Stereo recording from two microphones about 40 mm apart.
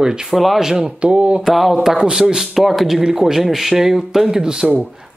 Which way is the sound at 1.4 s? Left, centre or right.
Centre.